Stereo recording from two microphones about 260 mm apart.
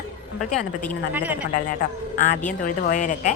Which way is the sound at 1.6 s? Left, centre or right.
Left.